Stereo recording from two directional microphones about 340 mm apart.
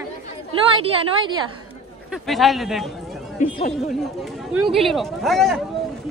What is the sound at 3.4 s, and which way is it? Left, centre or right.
Speech, left.